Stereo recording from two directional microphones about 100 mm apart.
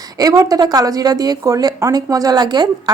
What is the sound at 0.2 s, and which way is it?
Speech, 35° right (ahead or behind).